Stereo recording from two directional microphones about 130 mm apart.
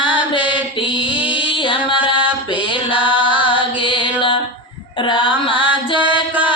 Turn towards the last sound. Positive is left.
turn(degrees=40)  # may be behind; listen again after turning